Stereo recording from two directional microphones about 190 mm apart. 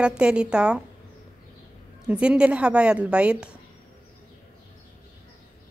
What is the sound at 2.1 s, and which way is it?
A woman's voice, 5° right (ahead or behind).